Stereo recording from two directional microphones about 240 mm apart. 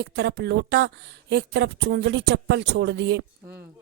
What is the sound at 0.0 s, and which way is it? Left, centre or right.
A woman's voice, right.